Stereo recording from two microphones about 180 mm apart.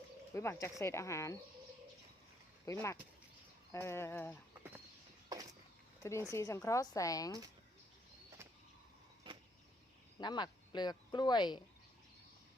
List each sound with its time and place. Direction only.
0.3 s a woman's voice: 15° left (ahead or behind)
2.7 s a woman's voice: 20° left (ahead or behind)
6.0 s a woman's voice: 15° left (ahead or behind)
10.2 s speech: 25° left (ahead or behind)